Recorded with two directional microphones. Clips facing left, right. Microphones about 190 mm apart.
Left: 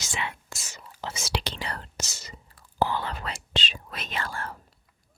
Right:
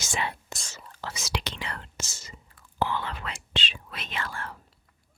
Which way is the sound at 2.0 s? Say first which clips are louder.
Left 3 dB; 75° left (ahead or behind).